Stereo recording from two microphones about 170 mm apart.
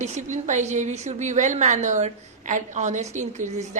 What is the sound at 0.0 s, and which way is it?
A woman's voice, 45° right (ahead or behind).